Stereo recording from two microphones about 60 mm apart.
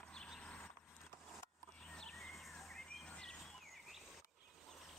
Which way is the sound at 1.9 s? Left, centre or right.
Centre.